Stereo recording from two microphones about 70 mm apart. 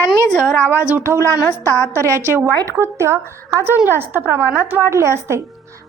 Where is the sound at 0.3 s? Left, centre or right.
Left.